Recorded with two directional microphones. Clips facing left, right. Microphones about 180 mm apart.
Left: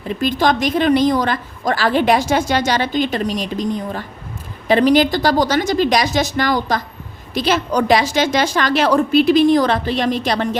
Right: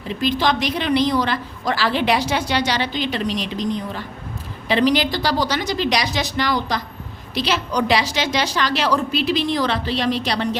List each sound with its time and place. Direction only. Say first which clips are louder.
0.1 s a woman's voice: left 3 dB; 50° left (ahead or behind)